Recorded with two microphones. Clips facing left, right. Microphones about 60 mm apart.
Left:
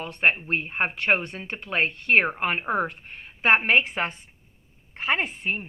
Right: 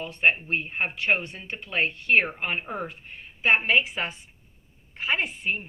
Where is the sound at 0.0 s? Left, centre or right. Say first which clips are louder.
Even; left.